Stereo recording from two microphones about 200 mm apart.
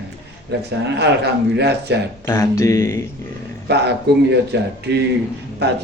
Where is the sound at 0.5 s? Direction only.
55° right (ahead or behind).